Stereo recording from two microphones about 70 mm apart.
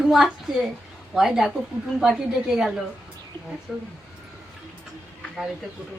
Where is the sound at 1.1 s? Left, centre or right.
Centre.